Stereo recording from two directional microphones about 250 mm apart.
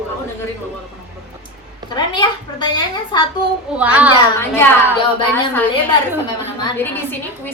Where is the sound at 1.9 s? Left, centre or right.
Centre.